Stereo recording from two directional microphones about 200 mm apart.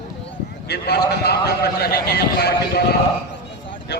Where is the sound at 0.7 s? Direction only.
50° left (ahead or behind).